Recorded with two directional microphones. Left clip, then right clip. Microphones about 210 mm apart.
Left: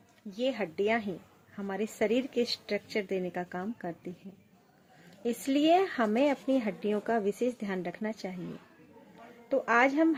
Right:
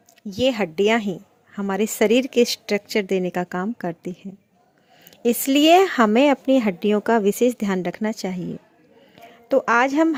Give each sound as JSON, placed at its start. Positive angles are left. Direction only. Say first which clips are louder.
{"t": 0.2, "sound": "speech", "louder": "right 11 dB", "side_deg": -50}
{"t": 5.2, "sound": "speech", "louder": "right 11 dB", "side_deg": -50}
{"t": 9.5, "sound": "speech", "louder": "right 8 dB", "side_deg": -50}